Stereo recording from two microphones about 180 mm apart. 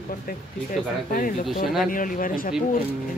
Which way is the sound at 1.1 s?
50° left (ahead or behind).